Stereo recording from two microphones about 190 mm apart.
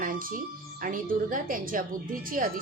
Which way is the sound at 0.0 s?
50° right (ahead or behind).